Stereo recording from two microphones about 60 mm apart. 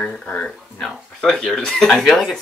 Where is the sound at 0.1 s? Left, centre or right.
Centre.